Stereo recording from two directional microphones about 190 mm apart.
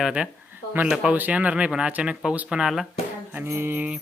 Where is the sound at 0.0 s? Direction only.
5° right (ahead or behind).